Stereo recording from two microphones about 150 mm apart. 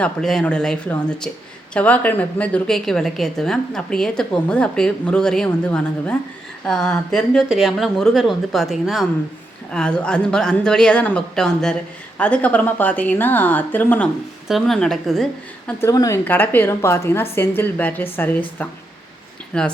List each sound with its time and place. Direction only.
0.0 s a woman's voice: 5° left (ahead or behind)
14.4 s a woman's voice: centre (ahead or behind)
15.8 s speech: 20° left (ahead or behind)